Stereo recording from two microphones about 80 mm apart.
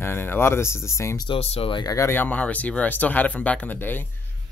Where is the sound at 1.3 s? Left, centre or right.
Left.